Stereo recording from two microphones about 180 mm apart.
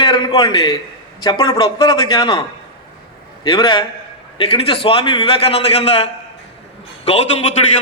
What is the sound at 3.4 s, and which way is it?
A man's voice, 25° left (ahead or behind).